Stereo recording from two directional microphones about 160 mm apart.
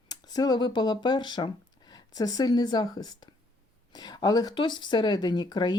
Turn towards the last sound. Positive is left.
turn(degrees=25)  # may be behind; listen again after turning